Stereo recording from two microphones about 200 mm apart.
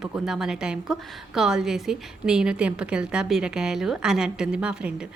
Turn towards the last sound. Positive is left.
turn(degrees=-5)  # may be behind; listen again after turning